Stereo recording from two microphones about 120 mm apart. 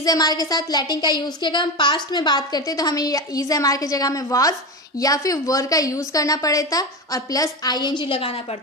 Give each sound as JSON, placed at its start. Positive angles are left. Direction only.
{"t": 0.0, "sound": "a woman's voice", "side_deg": 30}